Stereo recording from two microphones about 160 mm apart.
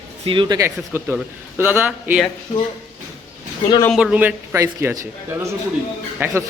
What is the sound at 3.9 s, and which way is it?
Speech, 5° right (ahead or behind).